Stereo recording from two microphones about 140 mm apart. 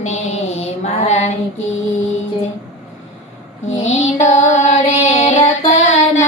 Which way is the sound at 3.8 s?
55° left (ahead or behind).